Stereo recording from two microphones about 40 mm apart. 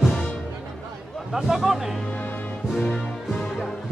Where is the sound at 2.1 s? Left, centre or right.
Left.